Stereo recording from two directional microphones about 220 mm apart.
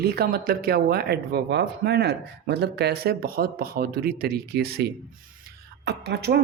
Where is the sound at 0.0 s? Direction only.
45° right (ahead or behind).